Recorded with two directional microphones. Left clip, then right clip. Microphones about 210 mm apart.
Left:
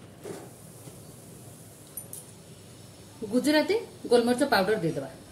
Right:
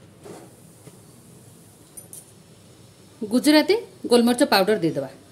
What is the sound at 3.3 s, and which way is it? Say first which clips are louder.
A woman's voice: right 6 dB; 45° right (ahead or behind).